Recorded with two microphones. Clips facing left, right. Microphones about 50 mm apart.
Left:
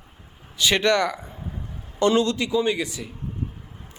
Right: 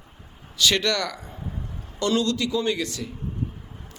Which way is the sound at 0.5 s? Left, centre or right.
Left.